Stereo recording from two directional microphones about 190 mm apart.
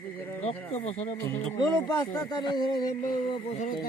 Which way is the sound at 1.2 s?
20° left (ahead or behind).